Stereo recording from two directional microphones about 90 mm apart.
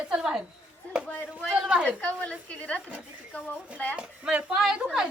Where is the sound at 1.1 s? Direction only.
20° left (ahead or behind).